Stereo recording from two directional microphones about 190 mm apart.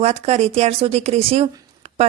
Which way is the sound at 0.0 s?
35° right (ahead or behind).